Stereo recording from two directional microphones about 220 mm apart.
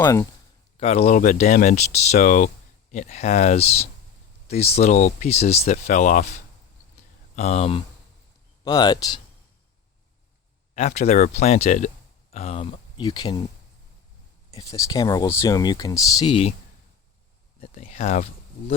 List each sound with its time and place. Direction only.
0.0 s speech: 15° left (ahead or behind)
0.8 s speech: 30° left (ahead or behind)
8.6 s speech: 20° left (ahead or behind)
10.8 s speech: 30° left (ahead or behind)
14.5 s speech: 15° left (ahead or behind)
17.6 s speech: 30° left (ahead or behind)